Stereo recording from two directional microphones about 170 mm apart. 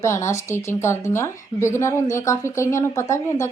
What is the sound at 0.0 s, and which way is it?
A woman's voice, 15° left (ahead or behind).